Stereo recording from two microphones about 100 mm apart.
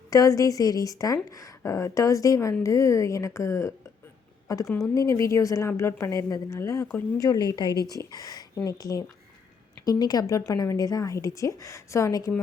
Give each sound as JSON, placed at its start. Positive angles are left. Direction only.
{"t": 0.1, "sound": "a woman's voice", "side_deg": 35}
{"t": 7.2, "sound": "a woman's voice", "side_deg": 45}